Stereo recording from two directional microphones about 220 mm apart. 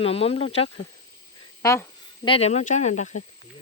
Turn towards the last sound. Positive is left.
turn(degrees=30)  # may be behind; listen again after turning